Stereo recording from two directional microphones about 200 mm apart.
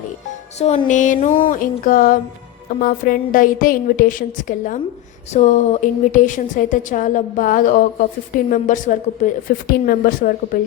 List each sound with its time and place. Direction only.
0.6 s a woman's voice: 35° left (ahead or behind)